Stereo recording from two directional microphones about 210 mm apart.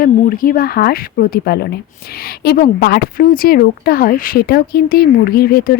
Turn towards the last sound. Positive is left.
turn(degrees=45)  # may be behind; listen again after turning